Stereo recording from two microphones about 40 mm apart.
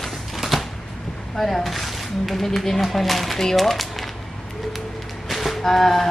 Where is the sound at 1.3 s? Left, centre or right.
Centre.